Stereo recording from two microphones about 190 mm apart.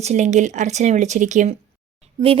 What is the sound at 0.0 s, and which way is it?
Speech, 35° right (ahead or behind).